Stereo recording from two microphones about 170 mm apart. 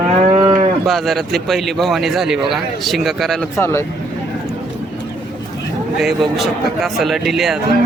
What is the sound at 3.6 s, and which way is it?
Speech, 15° left (ahead or behind).